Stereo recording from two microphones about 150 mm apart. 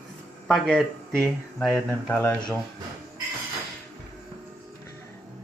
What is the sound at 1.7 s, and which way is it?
Speech, 15° left (ahead or behind).